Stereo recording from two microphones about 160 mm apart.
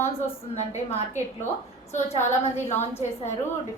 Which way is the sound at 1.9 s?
45° left (ahead or behind).